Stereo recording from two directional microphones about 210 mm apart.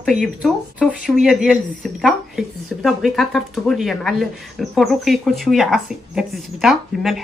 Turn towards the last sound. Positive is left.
turn(degrees=0)  # may be behind; listen again after turning